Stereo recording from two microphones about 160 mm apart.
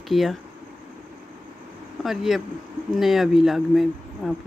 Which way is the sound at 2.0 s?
Centre (ahead or behind).